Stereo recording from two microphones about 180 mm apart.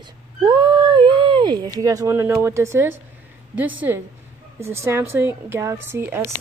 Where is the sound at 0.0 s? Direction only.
25° right (ahead or behind).